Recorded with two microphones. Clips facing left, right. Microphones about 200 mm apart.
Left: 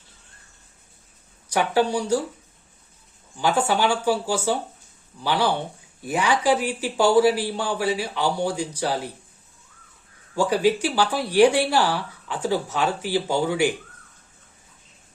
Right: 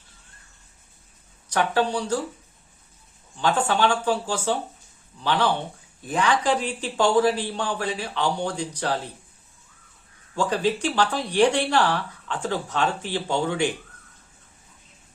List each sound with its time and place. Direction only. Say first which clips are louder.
1.5 s speech: left 2 dB; 10° left (ahead or behind)
3.3 s speech: left 1 dB; 10° left (ahead or behind)
10.3 s speech: left 3 dB; 10° left (ahead or behind)